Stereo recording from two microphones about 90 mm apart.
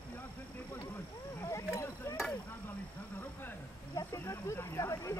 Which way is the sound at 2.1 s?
30° left (ahead or behind).